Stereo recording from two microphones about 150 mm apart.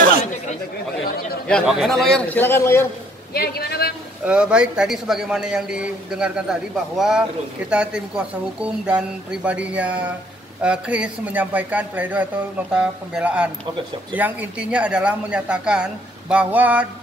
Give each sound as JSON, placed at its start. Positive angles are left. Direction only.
{"t": 1.5, "sound": "a man's voice", "side_deg": 0}
{"t": 3.3, "sound": "a man's voice", "side_deg": 90}
{"t": 4.2, "sound": "a man's voice", "side_deg": -5}